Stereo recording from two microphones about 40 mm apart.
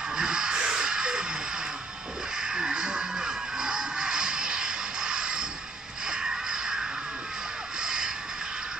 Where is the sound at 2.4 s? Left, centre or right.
Centre.